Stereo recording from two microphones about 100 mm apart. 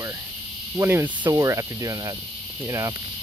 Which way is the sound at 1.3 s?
35° right (ahead or behind).